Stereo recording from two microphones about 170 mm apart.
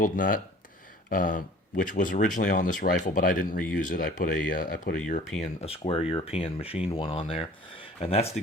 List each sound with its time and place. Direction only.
0.0 s speech: 55° left (ahead or behind)
5.4 s speech: 35° left (ahead or behind)